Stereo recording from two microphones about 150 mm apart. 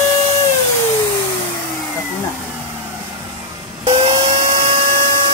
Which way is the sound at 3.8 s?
40° right (ahead or behind).